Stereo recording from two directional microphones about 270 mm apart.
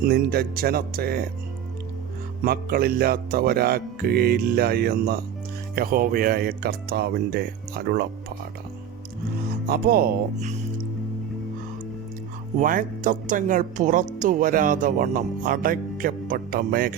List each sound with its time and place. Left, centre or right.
0.0 s speech: right
2.4 s speech: right
9.5 s speech: right
12.5 s speech: right